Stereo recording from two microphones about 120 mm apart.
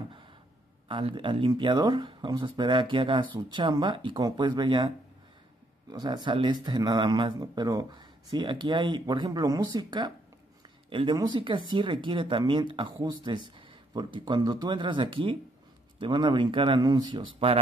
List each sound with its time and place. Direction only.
0.8 s speech: 45° right (ahead or behind)
5.9 s speech: 35° right (ahead or behind)